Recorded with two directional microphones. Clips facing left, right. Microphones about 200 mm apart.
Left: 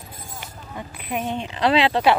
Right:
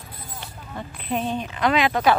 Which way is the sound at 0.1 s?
45° left (ahead or behind).